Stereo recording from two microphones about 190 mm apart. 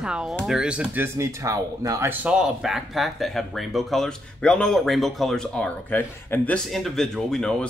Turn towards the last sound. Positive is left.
turn(degrees=5)  # may be behind; listen again after turning